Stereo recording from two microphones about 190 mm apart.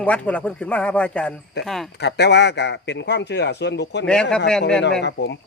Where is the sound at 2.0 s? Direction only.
60° left (ahead or behind).